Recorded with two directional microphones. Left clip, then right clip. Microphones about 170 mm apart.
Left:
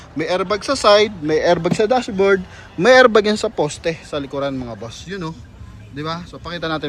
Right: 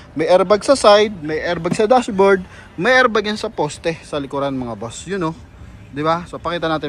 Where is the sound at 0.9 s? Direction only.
20° left (ahead or behind); by 2.4 s centre (ahead or behind).